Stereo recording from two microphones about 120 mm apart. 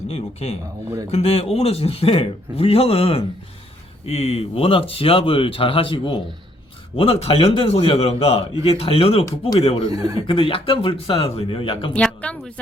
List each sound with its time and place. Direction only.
0.1 s a man's voice: 60° left (ahead or behind)
9.9 s speech: 30° right (ahead or behind)
10.2 s a man's voice: 50° left (ahead or behind)
11.9 s speech: 10° left (ahead or behind)